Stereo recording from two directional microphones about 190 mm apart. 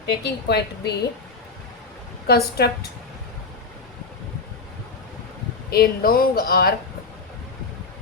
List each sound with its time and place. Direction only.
0.0 s a woman's voice: 60° left (ahead or behind)
2.2 s a woman's voice: 55° left (ahead or behind)
5.7 s speech: 55° left (ahead or behind)